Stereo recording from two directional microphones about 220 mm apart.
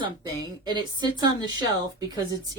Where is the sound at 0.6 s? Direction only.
20° right (ahead or behind).